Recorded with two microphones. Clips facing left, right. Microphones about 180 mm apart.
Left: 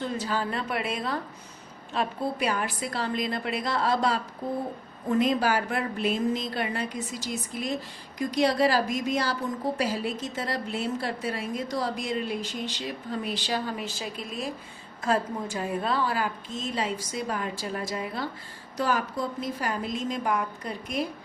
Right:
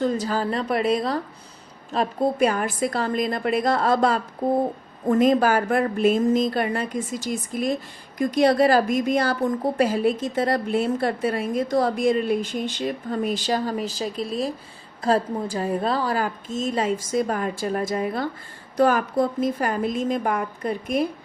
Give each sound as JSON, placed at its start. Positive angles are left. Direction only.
{"t": 0.0, "sound": "a woman's voice", "side_deg": -40}